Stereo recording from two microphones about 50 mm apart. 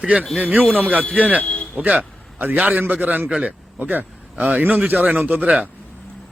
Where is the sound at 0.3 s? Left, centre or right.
Right.